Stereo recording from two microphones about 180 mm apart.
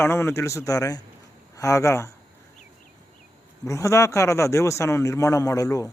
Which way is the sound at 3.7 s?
15° left (ahead or behind).